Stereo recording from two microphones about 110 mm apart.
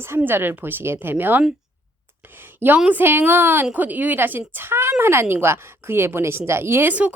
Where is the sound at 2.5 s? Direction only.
15° right (ahead or behind).